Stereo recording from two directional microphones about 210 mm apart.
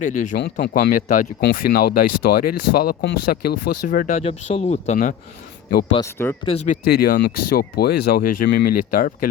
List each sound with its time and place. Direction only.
0.0 s speech: 40° left (ahead or behind)
4.2 s speech: 30° left (ahead or behind)
6.0 s speech: 10° left (ahead or behind)
6.4 s speech: 30° left (ahead or behind)
6.8 s speech: 45° left (ahead or behind)